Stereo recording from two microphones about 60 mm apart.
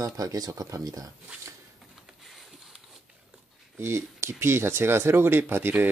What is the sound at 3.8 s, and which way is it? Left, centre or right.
Speech, right.